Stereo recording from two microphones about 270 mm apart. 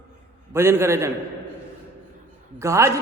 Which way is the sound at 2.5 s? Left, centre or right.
Centre.